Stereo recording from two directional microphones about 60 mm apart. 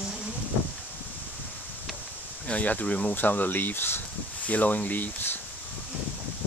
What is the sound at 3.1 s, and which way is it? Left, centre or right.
Speech, left.